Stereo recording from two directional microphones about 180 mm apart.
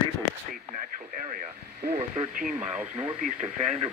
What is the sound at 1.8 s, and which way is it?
Speech, 45° right (ahead or behind).